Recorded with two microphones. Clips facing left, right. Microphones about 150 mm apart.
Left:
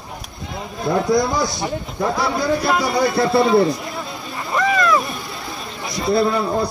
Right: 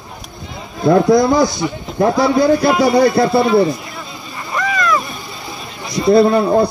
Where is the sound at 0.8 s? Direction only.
Centre (ahead or behind).